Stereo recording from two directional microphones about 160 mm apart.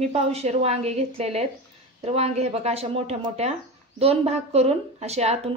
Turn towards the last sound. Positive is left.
turn(degrees=-40)  # may be behind; listen again after turning